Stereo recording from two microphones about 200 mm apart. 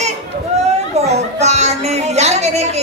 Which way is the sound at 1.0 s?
35° right (ahead or behind).